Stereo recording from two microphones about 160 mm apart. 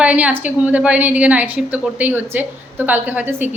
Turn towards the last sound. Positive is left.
turn(degrees=-10)  # may be behind; listen again after turning